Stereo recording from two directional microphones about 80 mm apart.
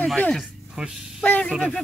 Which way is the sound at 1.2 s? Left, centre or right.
Centre.